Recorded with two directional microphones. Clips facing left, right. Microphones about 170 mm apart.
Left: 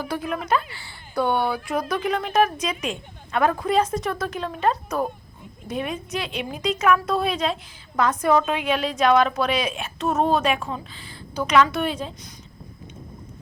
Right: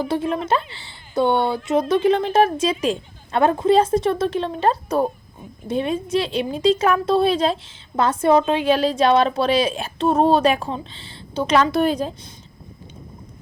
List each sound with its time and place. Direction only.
0.0 s a woman's voice: 25° right (ahead or behind)